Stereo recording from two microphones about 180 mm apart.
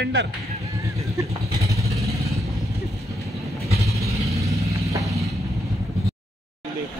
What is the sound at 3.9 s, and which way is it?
Vehicle, 15° right (ahead or behind).